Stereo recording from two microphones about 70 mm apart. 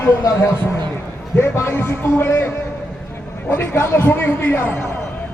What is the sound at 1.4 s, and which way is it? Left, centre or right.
Speech, left.